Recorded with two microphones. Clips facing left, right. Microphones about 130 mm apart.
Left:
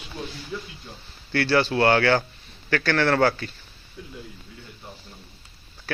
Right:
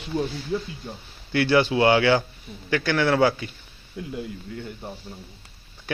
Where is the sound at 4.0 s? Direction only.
80° right.